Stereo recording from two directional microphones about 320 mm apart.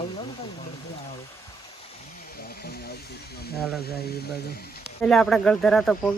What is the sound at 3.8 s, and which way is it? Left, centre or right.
Speech, left.